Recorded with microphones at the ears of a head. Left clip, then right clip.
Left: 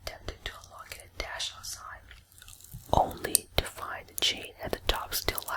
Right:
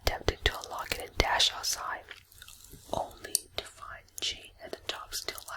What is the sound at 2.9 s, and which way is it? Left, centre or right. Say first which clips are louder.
Whispering: left 8 dB; left.